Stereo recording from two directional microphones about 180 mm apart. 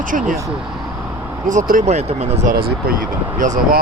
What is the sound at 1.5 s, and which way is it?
Speech, 45° right (ahead or behind).